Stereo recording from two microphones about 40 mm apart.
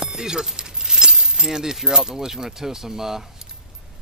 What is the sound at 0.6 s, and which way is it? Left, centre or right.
Keys jangling, centre.